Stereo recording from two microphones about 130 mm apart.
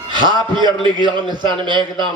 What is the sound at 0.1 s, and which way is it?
A man's voice, 35° right (ahead or behind).